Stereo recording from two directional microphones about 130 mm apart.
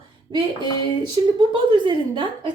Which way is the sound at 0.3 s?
35° right (ahead or behind).